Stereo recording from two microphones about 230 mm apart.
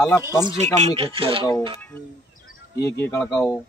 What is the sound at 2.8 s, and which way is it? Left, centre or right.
Speech, centre.